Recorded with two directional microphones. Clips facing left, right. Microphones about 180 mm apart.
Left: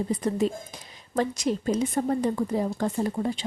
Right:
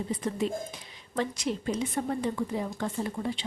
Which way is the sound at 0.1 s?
40° left (ahead or behind).